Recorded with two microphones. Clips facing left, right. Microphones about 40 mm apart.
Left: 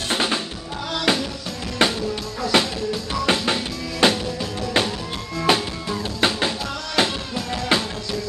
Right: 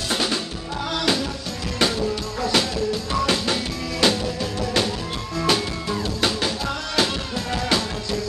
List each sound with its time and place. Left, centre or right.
0.1 s music: left